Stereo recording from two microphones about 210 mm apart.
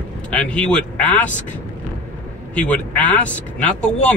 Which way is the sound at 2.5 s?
5° left (ahead or behind).